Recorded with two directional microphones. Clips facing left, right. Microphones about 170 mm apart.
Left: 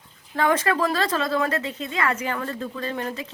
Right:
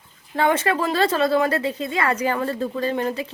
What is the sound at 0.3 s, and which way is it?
A woman's voice, 30° right (ahead or behind).